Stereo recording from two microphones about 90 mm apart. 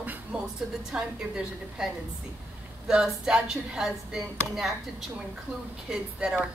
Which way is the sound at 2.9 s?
10° right (ahead or behind).